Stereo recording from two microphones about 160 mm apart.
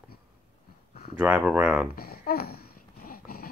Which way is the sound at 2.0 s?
70° left (ahead or behind).